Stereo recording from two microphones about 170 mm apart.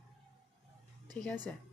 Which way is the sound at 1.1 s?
5° left (ahead or behind).